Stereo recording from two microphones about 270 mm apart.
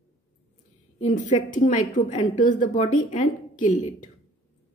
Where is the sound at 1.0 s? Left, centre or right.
Left.